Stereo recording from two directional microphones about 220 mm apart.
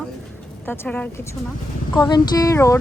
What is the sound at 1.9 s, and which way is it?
Speech, 20° left (ahead or behind).